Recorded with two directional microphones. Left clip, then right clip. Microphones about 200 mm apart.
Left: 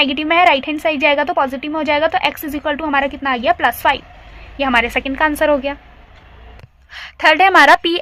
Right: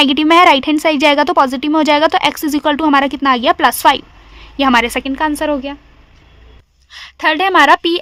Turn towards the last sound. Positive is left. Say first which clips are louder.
# left 1 dB
turn(degrees=-30)  # may be behind; listen again after turning